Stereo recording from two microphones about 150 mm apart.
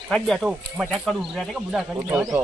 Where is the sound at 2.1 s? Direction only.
20° right (ahead or behind).